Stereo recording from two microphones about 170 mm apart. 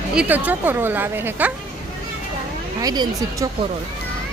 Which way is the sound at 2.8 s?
25° right (ahead or behind).